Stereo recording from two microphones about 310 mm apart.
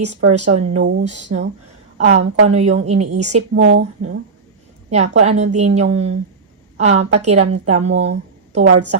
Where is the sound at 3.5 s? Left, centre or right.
Right.